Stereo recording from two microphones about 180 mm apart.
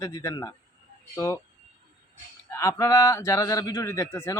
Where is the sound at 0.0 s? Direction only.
15° left (ahead or behind).